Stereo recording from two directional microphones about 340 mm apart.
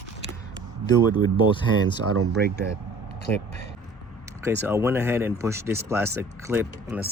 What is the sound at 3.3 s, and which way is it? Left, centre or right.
Speech, centre.